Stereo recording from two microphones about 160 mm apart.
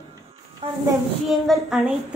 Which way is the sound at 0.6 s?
35° right (ahead or behind).